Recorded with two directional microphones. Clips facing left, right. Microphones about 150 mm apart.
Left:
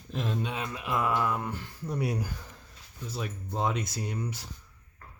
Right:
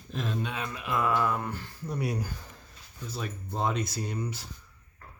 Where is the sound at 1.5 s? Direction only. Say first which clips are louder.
Left 1 dB; 20° left (ahead or behind).